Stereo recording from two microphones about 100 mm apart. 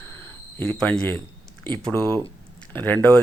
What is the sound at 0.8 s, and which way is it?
Speech, 10° left (ahead or behind).